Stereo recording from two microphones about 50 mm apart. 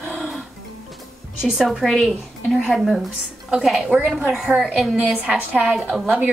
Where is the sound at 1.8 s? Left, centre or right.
Centre.